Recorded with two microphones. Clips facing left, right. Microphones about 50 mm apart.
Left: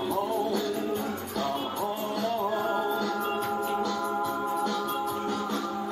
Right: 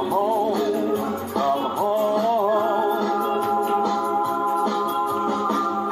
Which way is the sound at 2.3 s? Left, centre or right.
Right.